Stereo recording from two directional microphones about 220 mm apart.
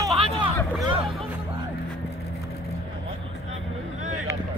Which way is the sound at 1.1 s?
Centre (ahead or behind).